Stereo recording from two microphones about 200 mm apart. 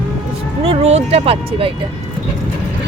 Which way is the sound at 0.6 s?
30° right (ahead or behind).